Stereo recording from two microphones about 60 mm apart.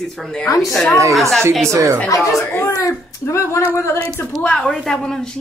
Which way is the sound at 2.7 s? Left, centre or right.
Left.